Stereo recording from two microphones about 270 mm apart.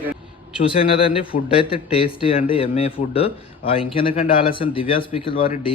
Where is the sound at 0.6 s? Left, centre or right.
Left.